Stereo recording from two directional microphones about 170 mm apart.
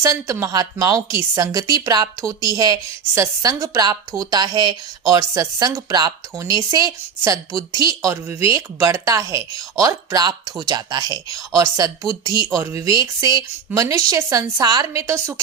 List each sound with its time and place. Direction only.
0.0 s a woman's voice: 15° right (ahead or behind)